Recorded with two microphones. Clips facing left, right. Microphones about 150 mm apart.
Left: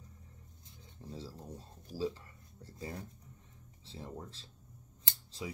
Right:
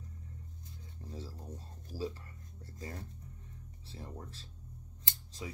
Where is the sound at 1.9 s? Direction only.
15° left (ahead or behind).